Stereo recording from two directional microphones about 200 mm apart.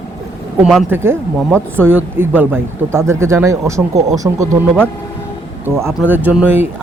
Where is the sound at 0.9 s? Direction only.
10° right (ahead or behind).